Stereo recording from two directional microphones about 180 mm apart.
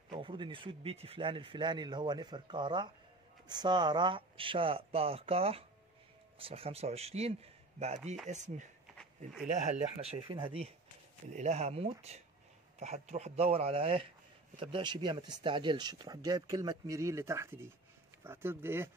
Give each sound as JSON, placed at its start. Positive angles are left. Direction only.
{"t": 0.1, "sound": "a man's voice", "side_deg": -30}